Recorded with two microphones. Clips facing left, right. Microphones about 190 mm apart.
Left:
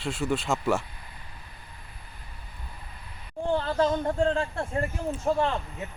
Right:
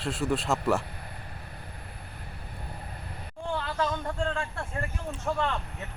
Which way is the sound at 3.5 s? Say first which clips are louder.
Left 6 dB; 40° left (ahead or behind).